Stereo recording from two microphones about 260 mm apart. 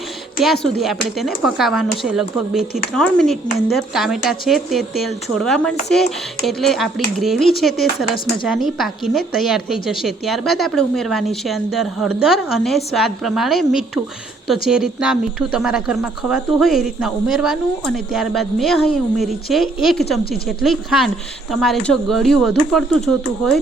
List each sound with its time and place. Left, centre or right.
0.4 s speech: centre
8.0 s speech: left
8.4 s speech: centre